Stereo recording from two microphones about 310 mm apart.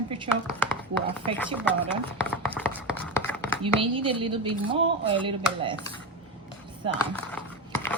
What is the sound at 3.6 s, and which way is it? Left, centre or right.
A woman's voice, centre.